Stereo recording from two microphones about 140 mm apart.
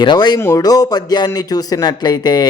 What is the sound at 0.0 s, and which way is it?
Speech, 30° left (ahead or behind).